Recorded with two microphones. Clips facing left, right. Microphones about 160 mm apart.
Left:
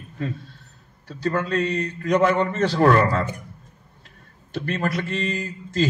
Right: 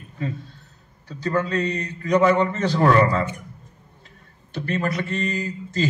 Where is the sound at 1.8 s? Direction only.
50° left (ahead or behind).